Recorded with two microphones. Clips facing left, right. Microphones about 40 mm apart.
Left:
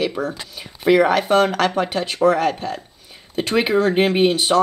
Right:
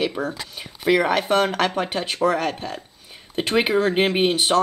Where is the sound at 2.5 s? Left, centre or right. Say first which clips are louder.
Left 4 dB; centre.